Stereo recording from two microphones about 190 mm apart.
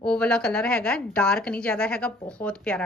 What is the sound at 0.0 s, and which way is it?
A woman's voice, 5° left (ahead or behind).